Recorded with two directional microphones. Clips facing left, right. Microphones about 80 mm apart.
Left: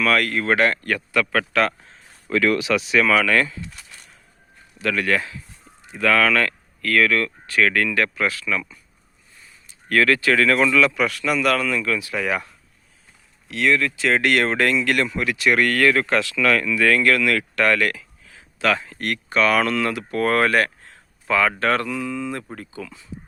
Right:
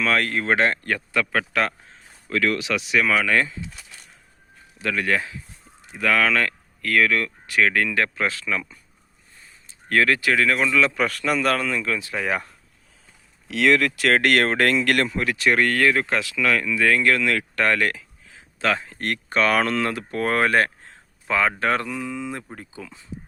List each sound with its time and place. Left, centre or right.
0.0 s speech: right
2.3 s speech: centre
3.1 s speech: centre
4.8 s speech: centre
10.8 s speech: right
13.6 s speech: right
15.5 s speech: right